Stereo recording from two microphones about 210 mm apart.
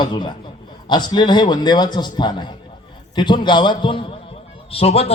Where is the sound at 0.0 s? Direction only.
20° left (ahead or behind).